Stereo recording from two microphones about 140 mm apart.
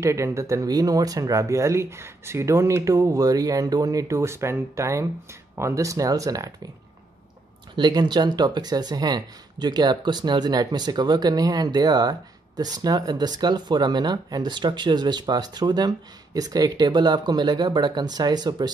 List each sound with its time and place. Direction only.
0.0 s speech: 20° right (ahead or behind)
7.7 s speech: 30° right (ahead or behind)